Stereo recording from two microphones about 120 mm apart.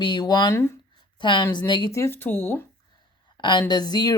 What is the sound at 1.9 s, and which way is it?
Speech, 20° left (ahead or behind).